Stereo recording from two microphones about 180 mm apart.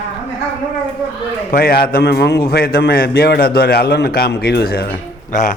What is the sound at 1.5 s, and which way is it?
A man's voice, 55° left (ahead or behind).